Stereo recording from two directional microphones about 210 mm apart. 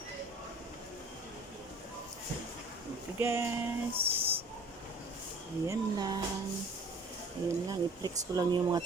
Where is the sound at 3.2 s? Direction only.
10° right (ahead or behind).